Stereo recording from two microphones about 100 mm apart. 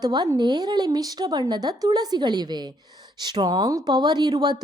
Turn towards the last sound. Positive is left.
turn(degrees=-40)  # may be behind; listen again after turning